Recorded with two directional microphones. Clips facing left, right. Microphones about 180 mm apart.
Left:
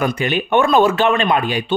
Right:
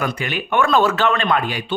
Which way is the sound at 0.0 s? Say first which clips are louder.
Left 5 dB; 25° left (ahead or behind).